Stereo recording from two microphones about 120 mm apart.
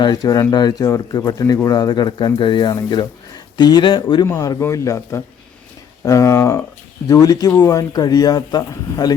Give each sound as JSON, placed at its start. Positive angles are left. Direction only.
{"t": 0.0, "sound": "speech", "side_deg": 30}
{"t": 4.3, "sound": "speech", "side_deg": 25}